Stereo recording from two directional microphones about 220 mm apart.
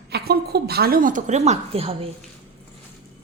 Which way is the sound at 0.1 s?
45° right (ahead or behind).